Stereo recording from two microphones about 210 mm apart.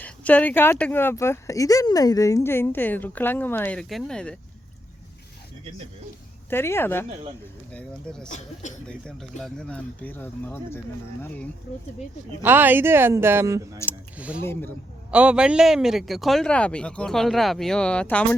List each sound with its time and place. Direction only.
0.0 s speech: 5° left (ahead or behind)
6.5 s a man's voice: 10° left (ahead or behind)
12.4 s speech: 10° right (ahead or behind)
14.4 s speech: 10° left (ahead or behind)
15.1 s a man's voice: 5° right (ahead or behind)